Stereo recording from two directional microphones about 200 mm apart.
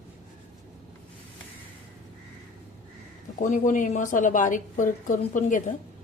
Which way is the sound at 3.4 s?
40° left (ahead or behind).